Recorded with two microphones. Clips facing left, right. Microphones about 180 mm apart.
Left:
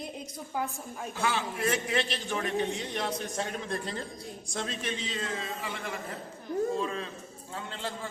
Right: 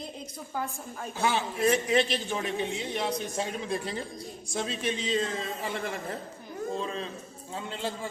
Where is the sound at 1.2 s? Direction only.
20° right (ahead or behind).